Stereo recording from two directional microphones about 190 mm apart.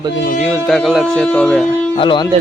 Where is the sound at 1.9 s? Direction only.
25° left (ahead or behind).